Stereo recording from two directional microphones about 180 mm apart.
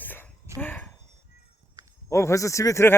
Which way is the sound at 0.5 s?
10° left (ahead or behind).